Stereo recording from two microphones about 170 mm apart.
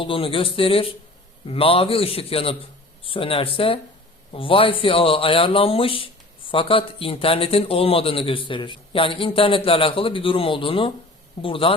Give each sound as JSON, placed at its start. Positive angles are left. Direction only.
{"t": 0.0, "sound": "speech", "side_deg": 30}